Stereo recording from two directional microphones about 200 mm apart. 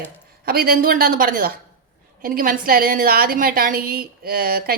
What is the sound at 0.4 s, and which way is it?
A woman's voice, 50° right (ahead or behind).